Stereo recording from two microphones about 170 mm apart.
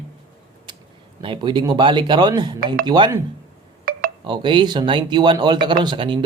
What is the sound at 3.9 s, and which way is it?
Telephone dialing, 60° right (ahead or behind).